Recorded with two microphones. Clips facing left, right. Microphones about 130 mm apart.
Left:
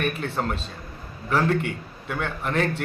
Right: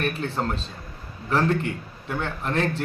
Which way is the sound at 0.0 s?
Centre (ahead or behind).